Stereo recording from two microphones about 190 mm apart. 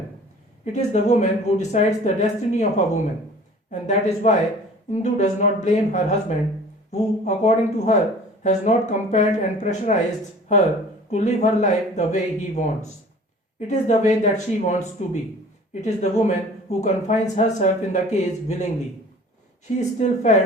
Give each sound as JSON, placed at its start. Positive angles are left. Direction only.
{"t": 0.6, "sound": "speech", "side_deg": 35}
{"t": 11.1, "sound": "speech", "side_deg": 35}
{"t": 19.7, "sound": "speech", "side_deg": 40}